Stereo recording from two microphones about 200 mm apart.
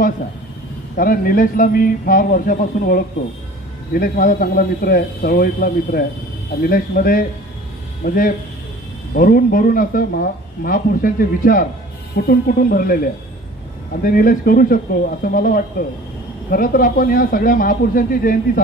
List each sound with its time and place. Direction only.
0.9 s speech: 45° left (ahead or behind)